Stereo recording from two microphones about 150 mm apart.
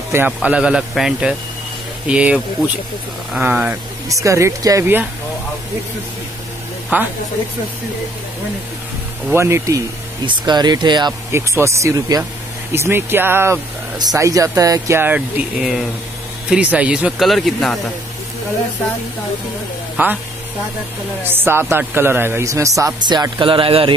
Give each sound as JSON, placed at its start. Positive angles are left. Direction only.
{"t": 0.1, "sound": "speech", "side_deg": -10}
{"t": 4.1, "sound": "speech", "side_deg": -20}
{"t": 6.9, "sound": "speech", "side_deg": -10}
{"t": 9.3, "sound": "speech", "side_deg": -20}
{"t": 10.2, "sound": "speech", "side_deg": -30}
{"t": 11.3, "sound": "speech", "side_deg": -20}
{"t": 20.0, "sound": "speech", "side_deg": -10}
{"t": 21.2, "sound": "speech", "side_deg": -15}